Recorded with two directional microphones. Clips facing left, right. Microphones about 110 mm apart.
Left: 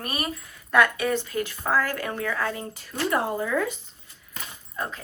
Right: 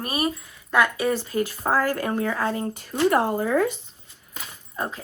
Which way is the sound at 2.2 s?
25° right (ahead or behind).